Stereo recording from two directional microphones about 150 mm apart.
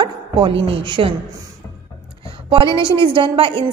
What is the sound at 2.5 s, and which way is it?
A woman's voice, 35° right (ahead or behind).